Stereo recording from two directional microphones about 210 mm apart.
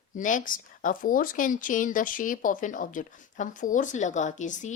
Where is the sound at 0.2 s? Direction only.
40° left (ahead or behind).